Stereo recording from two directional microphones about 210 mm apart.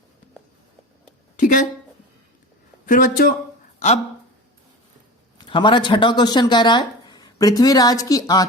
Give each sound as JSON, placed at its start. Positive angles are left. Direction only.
{"t": 1.4, "sound": "a sound", "side_deg": 40}
{"t": 2.8, "sound": "speech", "side_deg": 40}
{"t": 3.8, "sound": "speech", "side_deg": 30}
{"t": 5.4, "sound": "speech", "side_deg": 20}